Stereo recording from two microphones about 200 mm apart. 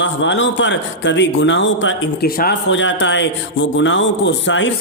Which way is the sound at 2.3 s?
45° left (ahead or behind).